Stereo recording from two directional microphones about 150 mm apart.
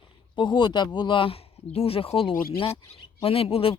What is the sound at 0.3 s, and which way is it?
Speech, 30° left (ahead or behind).